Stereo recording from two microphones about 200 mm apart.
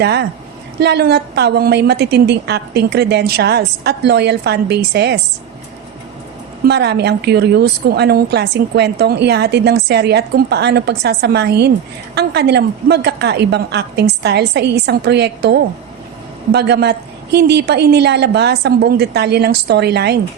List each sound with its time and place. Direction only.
0.0 s a woman's voice: 55° right (ahead or behind)
6.7 s a woman's voice: 55° right (ahead or behind)